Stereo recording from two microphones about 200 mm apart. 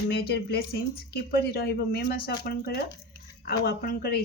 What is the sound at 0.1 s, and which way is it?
Speech, 50° left (ahead or behind).